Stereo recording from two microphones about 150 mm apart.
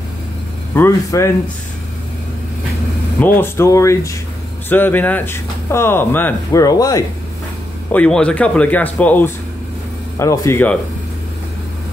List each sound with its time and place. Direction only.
0.7 s speech: 15° left (ahead or behind)
3.2 s speech: 15° left (ahead or behind)
7.9 s speech: 10° left (ahead or behind)